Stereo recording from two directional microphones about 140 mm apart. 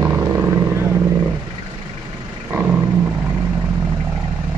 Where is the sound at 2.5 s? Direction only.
15° right (ahead or behind).